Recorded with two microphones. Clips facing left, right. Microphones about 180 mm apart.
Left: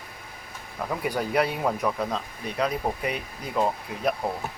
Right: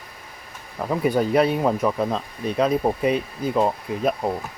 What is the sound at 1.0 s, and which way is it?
Speech, 25° right (ahead or behind).